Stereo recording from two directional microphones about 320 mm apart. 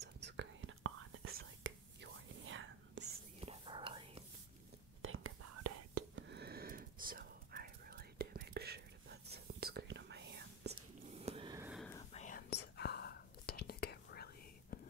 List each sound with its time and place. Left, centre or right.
0.2 s whispering: right
3.3 s whispering: centre
5.0 s whispering: right
6.1 s whispering: right
11.1 s a sound: centre
11.9 s whispering: left